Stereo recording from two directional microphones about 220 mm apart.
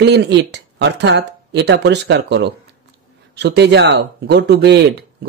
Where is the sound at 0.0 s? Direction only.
50° right (ahead or behind).